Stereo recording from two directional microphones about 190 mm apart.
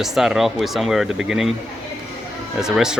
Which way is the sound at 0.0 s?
Centre (ahead or behind).